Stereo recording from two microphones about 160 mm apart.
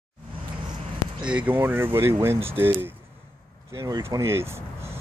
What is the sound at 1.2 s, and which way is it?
Speech, 10° right (ahead or behind).